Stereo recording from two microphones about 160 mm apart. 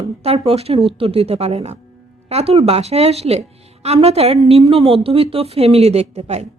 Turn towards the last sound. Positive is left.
turn(degrees=-45)  # may be behind; listen again after turning